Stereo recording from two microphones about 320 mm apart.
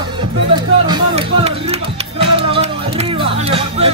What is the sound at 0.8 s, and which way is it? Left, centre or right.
Speech, centre.